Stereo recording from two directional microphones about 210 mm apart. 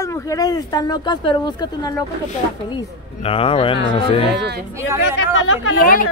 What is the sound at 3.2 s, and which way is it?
A woman's voice, 25° left (ahead or behind).